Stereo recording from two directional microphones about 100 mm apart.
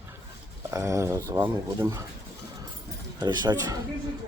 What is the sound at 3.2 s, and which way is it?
Speech, 40° right (ahead or behind).